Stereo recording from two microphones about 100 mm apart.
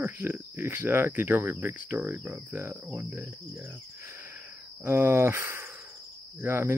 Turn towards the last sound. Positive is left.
turn(degrees=-20)  # may be behind; listen again after turning